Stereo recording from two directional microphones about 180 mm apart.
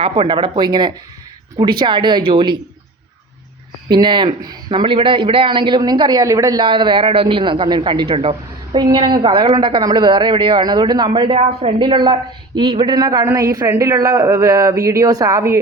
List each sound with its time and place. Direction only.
0.0 s speech: 30° right (ahead or behind)
3.8 s speech: 25° right (ahead or behind)